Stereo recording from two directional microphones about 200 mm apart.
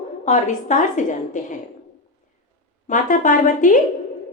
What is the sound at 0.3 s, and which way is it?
A woman's voice, 40° left (ahead or behind).